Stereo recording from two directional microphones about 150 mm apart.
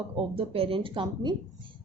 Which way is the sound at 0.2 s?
40° right (ahead or behind).